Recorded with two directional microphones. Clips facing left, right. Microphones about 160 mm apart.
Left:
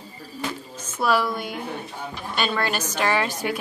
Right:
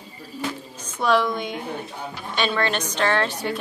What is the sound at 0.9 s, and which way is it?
A woman's voice, 5° left (ahead or behind).